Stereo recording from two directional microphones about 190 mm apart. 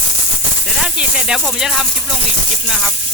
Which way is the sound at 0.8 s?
5° right (ahead or behind).